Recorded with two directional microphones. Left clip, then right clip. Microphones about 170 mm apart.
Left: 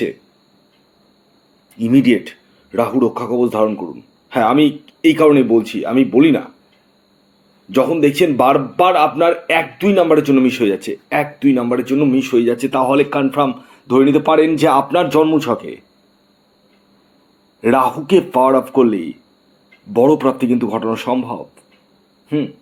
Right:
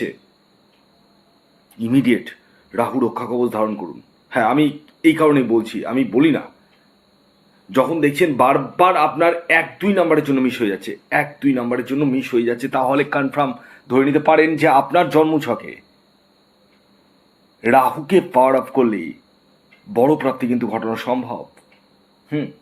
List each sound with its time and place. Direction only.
1.8 s a man's voice: 15° left (ahead or behind)
7.7 s a man's voice: 20° left (ahead or behind)
17.6 s speech: 15° left (ahead or behind)